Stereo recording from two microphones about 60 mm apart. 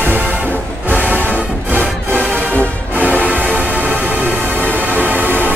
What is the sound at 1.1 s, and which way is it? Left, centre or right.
Music, right.